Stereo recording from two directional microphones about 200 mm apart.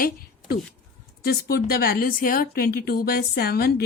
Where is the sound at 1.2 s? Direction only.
50° left (ahead or behind).